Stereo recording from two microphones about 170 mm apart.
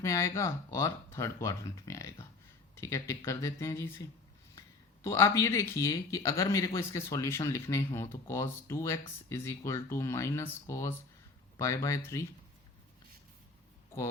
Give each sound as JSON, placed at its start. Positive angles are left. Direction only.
{"t": 0.0, "sound": "speech", "side_deg": 15}
{"t": 5.0, "sound": "speech", "side_deg": 20}